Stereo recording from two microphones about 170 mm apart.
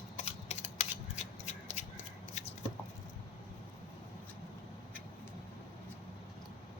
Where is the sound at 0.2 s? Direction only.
40° left (ahead or behind).